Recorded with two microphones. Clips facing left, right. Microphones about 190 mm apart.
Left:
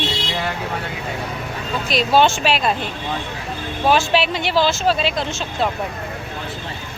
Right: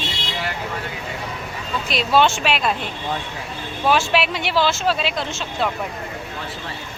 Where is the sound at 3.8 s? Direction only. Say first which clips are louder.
Left 2 dB; 35° left (ahead or behind).